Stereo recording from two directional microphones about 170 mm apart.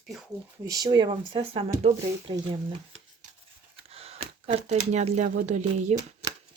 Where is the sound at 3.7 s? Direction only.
35° right (ahead or behind).